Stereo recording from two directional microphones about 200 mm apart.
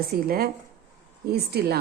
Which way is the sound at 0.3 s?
50° right (ahead or behind).